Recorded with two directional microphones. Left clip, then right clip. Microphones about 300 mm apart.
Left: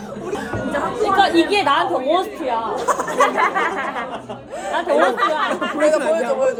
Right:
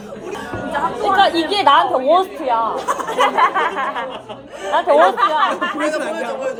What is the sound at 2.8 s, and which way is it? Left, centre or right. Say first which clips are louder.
Speech: even; centre.